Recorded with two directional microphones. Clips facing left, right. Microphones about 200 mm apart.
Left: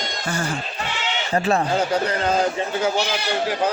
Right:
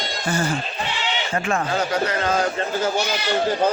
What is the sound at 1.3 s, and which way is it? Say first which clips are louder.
Speech: left 4 dB; 35° left (ahead or behind).